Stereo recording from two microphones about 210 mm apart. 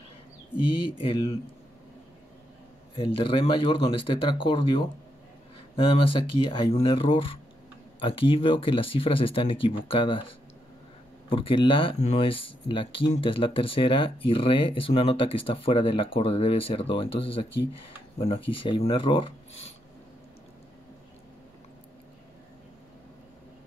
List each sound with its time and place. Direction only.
0.7 s speech: 25° left (ahead or behind)
3.0 s speech: 25° left (ahead or behind)
5.9 s speech: 25° left (ahead or behind)
11.2 s speech: 25° left (ahead or behind)